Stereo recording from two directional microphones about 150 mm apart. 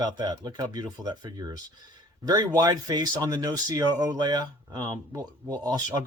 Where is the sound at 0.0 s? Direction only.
30° right (ahead or behind).